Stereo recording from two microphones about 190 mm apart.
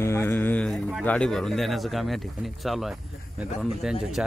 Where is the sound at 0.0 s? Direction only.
15° left (ahead or behind).